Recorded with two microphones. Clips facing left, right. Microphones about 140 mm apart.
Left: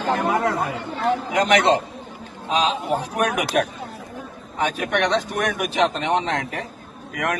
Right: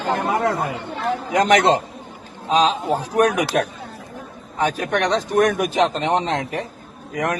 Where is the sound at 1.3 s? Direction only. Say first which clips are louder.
Right 3 dB; 35° right (ahead or behind).